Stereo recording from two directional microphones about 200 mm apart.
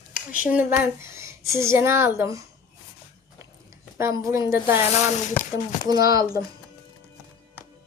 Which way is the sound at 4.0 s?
15° right (ahead or behind).